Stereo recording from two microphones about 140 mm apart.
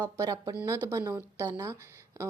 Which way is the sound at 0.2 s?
30° right (ahead or behind).